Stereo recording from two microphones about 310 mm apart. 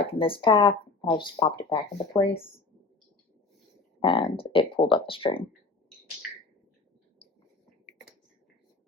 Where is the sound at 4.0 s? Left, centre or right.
Centre.